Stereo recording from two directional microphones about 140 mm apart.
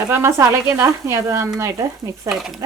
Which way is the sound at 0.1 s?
20° right (ahead or behind).